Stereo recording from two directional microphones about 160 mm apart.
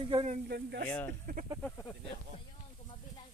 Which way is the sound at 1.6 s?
15° left (ahead or behind).